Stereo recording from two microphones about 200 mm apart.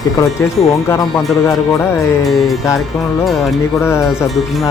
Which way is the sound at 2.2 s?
Centre (ahead or behind).